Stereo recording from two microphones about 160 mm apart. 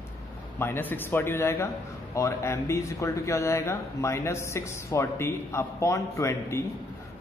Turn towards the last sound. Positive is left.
turn(degrees=15)  # may be behind; listen again after turning